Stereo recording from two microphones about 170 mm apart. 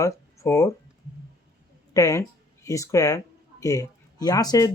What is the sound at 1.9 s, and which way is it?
Speech, 20° left (ahead or behind).